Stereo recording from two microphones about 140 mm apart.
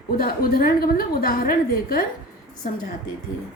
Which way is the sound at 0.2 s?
90° left.